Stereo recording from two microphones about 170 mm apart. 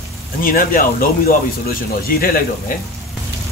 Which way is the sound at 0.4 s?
55° left (ahead or behind).